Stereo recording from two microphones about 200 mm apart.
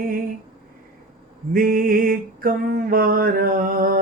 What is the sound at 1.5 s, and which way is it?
Music, 45° right (ahead or behind).